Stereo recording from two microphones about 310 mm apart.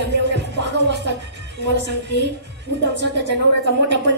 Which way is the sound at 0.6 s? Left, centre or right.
Right.